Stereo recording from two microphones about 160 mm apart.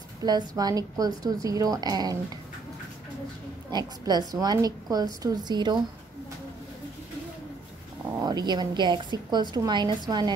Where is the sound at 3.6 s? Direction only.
25° right (ahead or behind).